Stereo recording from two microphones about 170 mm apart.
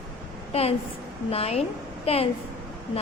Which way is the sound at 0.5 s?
35° left (ahead or behind).